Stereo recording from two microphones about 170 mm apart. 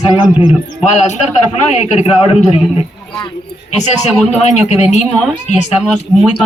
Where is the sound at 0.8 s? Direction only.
40° left (ahead or behind).